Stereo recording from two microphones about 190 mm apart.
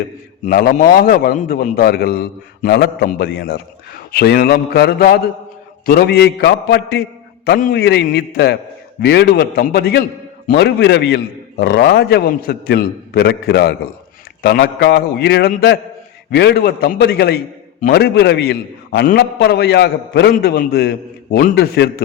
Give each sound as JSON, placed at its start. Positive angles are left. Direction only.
{"t": 0.5, "sound": "a man's voice", "side_deg": 50}